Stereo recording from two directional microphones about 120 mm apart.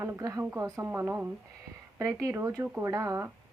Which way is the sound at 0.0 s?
25° right (ahead or behind).